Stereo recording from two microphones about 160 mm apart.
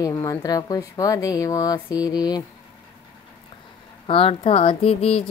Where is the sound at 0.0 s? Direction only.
25° left (ahead or behind).